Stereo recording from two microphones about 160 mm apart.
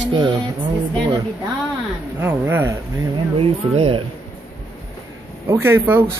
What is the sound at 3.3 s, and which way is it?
Speech, 35° right (ahead or behind).